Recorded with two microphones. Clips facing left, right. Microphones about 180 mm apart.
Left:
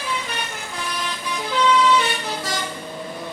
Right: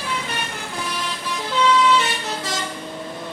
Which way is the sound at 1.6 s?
Centre (ahead or behind).